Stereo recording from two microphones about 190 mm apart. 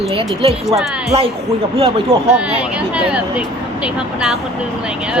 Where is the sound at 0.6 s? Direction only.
Centre (ahead or behind).